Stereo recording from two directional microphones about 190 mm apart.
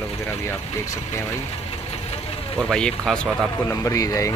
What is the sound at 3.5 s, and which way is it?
Speech, 15° left (ahead or behind).